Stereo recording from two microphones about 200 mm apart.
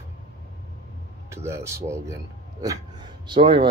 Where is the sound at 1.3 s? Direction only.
15° right (ahead or behind).